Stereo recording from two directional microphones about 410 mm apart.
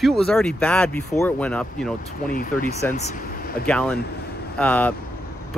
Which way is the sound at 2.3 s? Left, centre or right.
Centre.